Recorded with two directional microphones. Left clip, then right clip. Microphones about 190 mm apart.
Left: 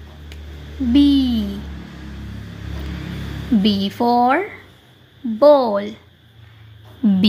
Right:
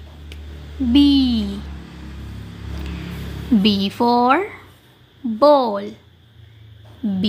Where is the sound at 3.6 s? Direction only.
10° right (ahead or behind).